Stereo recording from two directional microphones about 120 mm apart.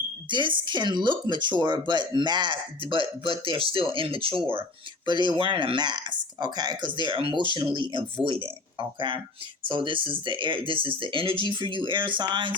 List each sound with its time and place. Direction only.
0.3 s speech: 40° right (ahead or behind)